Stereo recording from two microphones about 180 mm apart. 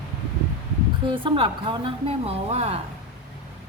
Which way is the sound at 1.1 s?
30° right (ahead or behind).